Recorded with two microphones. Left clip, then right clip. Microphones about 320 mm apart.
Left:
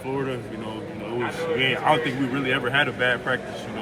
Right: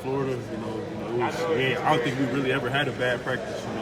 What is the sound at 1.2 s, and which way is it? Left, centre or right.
Speech, right.